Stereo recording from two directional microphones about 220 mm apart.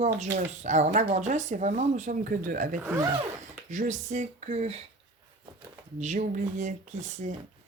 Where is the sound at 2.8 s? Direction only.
10° right (ahead or behind).